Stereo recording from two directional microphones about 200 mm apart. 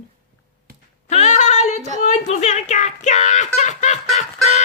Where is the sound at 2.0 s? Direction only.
35° left (ahead or behind).